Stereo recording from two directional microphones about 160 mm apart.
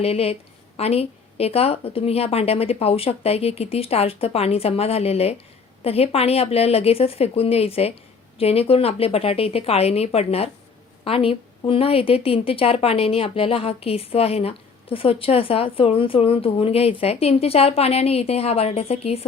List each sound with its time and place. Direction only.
0.0 s a woman's voice: 40° left (ahead or behind)